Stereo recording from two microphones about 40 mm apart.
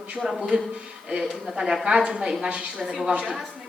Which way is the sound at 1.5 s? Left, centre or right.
Centre.